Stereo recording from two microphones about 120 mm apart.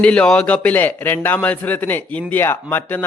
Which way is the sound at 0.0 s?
10° left (ahead or behind).